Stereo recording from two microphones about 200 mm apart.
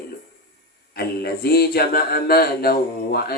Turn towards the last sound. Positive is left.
turn(degrees=50)  # may be behind; listen again after turning